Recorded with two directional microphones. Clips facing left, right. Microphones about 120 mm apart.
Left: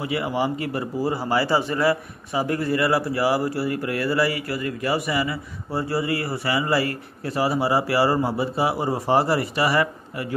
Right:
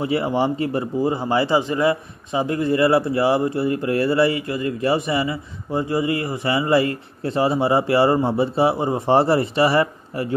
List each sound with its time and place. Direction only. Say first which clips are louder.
0.0 s a man's voice: right 4 dB; 30° right (ahead or behind)